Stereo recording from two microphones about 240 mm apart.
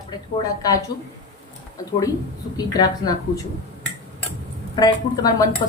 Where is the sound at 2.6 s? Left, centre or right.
Centre.